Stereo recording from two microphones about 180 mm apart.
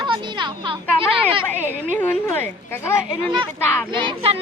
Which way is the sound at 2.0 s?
10° left (ahead or behind).